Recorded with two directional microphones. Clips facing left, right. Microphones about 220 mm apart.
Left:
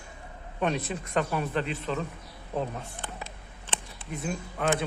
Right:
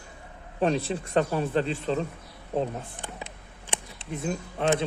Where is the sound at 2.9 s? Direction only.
15° right (ahead or behind).